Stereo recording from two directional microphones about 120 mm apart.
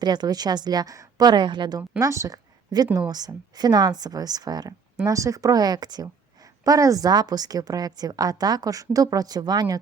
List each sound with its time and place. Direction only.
0.0 s a woman's voice: 35° right (ahead or behind)
2.0 s a woman's voice: 25° right (ahead or behind)